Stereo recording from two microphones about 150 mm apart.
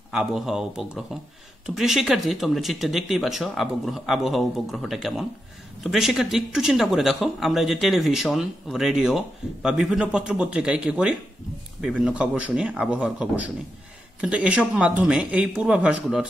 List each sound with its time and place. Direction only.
0.1 s speech: 5° right (ahead or behind)